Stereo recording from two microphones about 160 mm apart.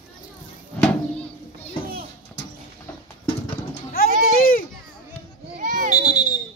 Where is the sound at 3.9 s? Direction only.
65° left (ahead or behind).